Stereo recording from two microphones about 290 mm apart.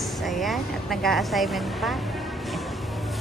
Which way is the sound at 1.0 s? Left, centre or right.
Centre.